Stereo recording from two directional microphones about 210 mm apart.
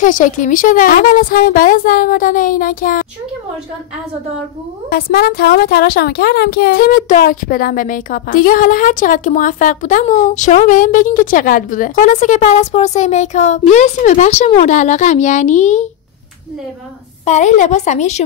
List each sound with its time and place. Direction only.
0.0 s a woman's voice: 40° left (ahead or behind)
4.9 s a woman's voice: 45° left (ahead or behind)
17.2 s a woman's voice: 35° left (ahead or behind)